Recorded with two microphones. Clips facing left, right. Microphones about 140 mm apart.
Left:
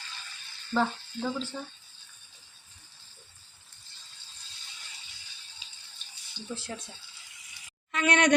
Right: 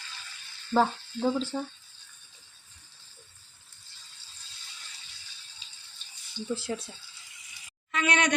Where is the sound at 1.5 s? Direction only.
35° right (ahead or behind).